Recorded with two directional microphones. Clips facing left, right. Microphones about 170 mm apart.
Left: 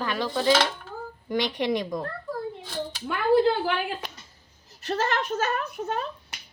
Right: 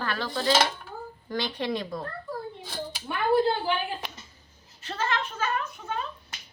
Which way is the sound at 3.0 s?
90° left.